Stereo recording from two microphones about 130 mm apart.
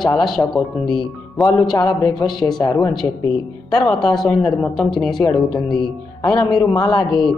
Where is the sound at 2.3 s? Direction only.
Centre (ahead or behind).